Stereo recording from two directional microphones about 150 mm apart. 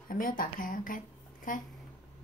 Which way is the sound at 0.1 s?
70° left (ahead or behind).